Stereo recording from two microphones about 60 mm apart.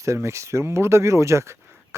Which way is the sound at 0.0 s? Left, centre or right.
Right.